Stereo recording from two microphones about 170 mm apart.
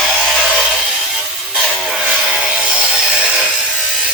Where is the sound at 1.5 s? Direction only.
Centre (ahead or behind).